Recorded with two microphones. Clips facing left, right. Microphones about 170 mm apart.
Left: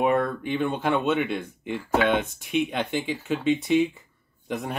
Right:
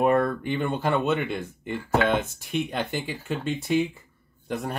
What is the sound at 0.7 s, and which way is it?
Speech, 5° right (ahead or behind).